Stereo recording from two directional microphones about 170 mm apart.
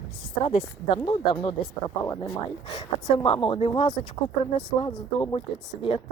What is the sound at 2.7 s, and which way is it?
Speech, 35° left (ahead or behind).